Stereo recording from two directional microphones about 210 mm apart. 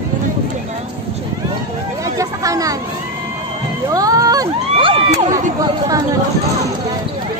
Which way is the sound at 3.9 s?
15° right (ahead or behind).